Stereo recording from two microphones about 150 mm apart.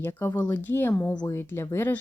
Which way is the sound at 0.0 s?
15° left (ahead or behind).